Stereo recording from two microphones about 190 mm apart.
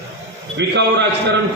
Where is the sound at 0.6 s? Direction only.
65° right (ahead or behind).